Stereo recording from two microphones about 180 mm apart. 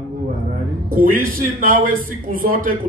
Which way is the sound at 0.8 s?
50° right (ahead or behind).